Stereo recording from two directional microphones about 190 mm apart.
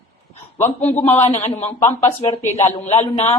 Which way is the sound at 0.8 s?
35° left (ahead or behind).